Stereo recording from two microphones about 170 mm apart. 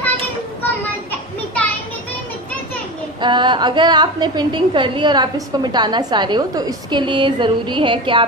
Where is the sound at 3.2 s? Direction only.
25° right (ahead or behind).